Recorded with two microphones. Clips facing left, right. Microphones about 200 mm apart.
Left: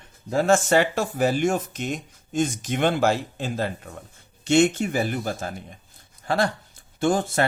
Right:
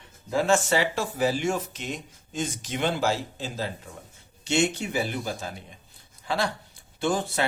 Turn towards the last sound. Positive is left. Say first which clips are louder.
# left 4 dB
turn(degrees=50)  # may be behind; listen again after turning